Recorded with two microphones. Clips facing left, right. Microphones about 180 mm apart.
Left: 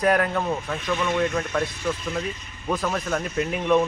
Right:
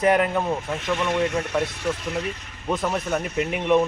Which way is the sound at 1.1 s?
75° right (ahead or behind).